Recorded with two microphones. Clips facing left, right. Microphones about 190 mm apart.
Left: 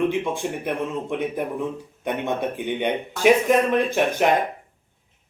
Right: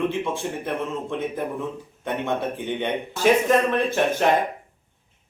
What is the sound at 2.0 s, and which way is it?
Speech, 15° left (ahead or behind).